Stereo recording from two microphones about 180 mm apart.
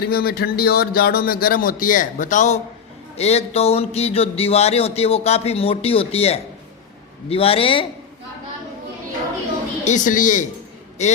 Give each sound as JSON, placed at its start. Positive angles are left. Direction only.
{"t": 0.0, "sound": "speech", "side_deg": 60}
{"t": 9.8, "sound": "a woman's voice", "side_deg": 45}